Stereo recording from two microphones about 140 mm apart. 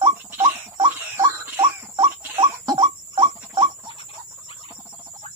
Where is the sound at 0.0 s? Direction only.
40° right (ahead or behind).